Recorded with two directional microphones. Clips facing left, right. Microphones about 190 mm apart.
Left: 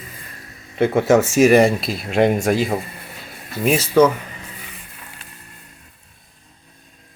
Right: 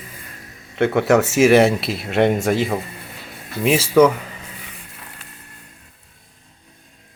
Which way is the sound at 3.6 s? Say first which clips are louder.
Right 1 dB; 5° right (ahead or behind).